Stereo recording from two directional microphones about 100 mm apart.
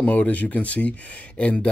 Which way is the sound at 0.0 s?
15° left (ahead or behind).